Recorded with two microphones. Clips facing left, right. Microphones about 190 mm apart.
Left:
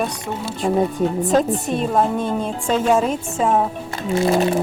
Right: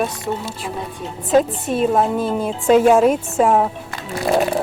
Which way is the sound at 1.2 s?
5° right (ahead or behind).